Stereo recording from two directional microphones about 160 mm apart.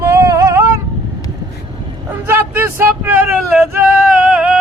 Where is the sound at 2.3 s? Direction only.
15° right (ahead or behind).